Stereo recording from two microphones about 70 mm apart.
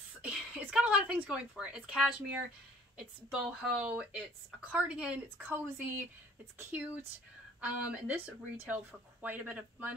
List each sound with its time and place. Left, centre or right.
0.2 s speech: centre
5.4 s speech: right
7.6 s speech: centre